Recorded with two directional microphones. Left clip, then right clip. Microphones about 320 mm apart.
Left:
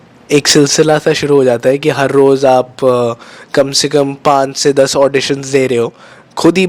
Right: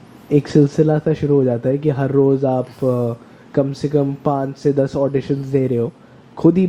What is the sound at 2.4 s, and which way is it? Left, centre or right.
Speech, left.